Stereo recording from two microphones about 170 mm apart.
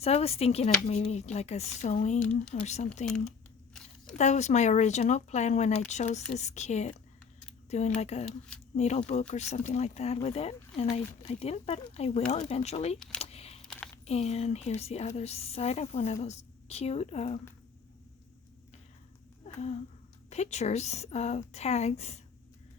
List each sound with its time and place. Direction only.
0.0 s speech: 35° left (ahead or behind)
2.1 s speech: 5° left (ahead or behind)
2.5 s speech: 45° left (ahead or behind)
4.2 s speech: 45° left (ahead or behind)
13.1 s a sound: 35° left (ahead or behind)
14.0 s a woman's voice: 35° left (ahead or behind)
19.5 s speech: 40° left (ahead or behind)